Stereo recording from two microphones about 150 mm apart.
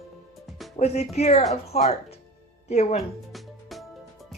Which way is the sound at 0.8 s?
45° left (ahead or behind).